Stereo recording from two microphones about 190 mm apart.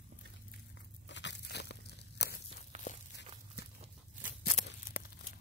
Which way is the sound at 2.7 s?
40° right (ahead or behind).